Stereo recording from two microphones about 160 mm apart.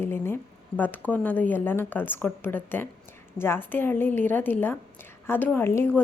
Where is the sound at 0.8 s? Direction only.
10° left (ahead or behind).